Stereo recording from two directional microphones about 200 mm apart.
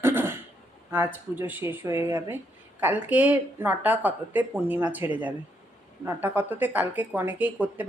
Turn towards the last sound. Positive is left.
turn(degrees=-10)  # may be behind; listen again after turning